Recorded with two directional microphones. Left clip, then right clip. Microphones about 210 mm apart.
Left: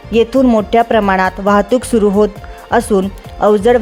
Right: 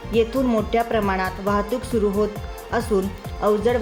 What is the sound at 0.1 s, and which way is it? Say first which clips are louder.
Speech: left 9 dB; 50° left (ahead or behind).